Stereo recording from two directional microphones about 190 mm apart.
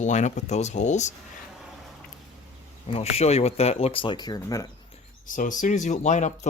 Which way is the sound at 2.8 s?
35° left (ahead or behind).